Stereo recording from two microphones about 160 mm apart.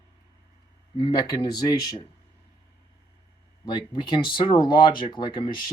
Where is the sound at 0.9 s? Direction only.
25° left (ahead or behind).